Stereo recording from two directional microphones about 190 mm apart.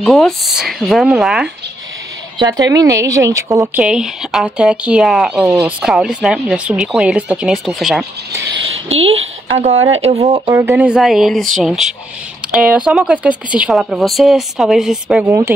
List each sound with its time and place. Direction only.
0.0 s speech: centre (ahead or behind)
2.3 s a woman's voice: 20° right (ahead or behind); by 8.1 s centre (ahead or behind)
8.3 s a sound: 65° right (ahead or behind); by 9.3 s 90° right
9.8 s speech: 90° right
10.0 s speech: 35° right (ahead or behind)
10.5 s speech: 10° right (ahead or behind)